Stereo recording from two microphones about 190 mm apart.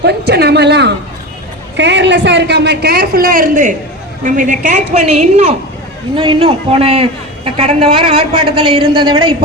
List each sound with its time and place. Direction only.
0.0 s a woman's voice: 60° right (ahead or behind); by 9.3 s 25° right (ahead or behind)